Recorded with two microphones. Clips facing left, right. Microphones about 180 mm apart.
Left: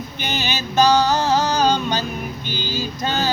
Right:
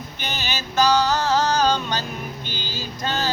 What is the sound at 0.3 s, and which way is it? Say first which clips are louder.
Music: left 4 dB; 25° left (ahead or behind).